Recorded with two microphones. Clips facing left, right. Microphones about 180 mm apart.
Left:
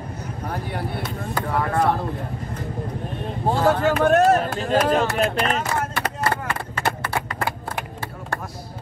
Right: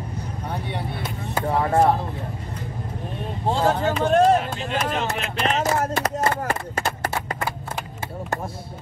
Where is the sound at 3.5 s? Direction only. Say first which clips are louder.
Left 3 dB; 25° right (ahead or behind).